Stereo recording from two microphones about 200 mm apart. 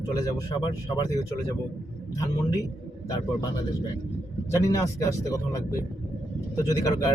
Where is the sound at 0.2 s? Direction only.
20° left (ahead or behind).